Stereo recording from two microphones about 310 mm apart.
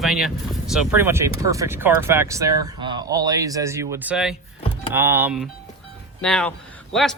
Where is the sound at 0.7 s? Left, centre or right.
Centre.